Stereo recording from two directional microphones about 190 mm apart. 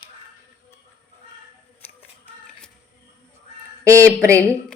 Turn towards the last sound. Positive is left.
turn(degrees=-15)  # may be behind; listen again after turning